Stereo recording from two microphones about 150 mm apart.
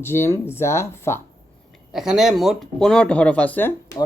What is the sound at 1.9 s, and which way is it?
Speech, 5° right (ahead or behind).